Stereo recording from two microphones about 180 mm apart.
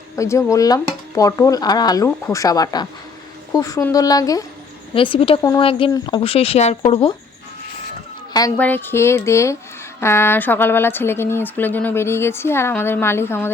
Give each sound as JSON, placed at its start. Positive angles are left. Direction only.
{"t": 0.2, "sound": "speech", "side_deg": 15}
{"t": 4.9, "sound": "speech", "side_deg": 30}
{"t": 5.4, "sound": "speech", "side_deg": 20}
{"t": 8.3, "sound": "a sound", "side_deg": 20}
{"t": 8.5, "sound": "speech", "side_deg": 10}